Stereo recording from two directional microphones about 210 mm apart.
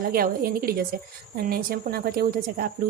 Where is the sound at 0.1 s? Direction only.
45° right (ahead or behind).